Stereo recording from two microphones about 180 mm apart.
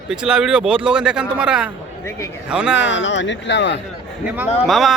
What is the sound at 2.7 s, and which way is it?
Speech, 85° left.